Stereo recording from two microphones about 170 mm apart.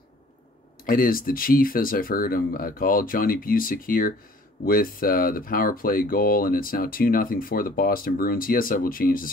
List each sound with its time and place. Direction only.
0.8 s speech: 55° left (ahead or behind)